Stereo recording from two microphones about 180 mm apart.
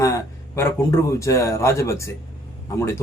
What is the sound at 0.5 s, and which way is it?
A man's voice, 15° left (ahead or behind).